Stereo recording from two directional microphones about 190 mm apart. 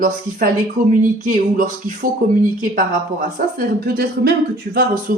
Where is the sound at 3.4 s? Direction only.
45° right (ahead or behind).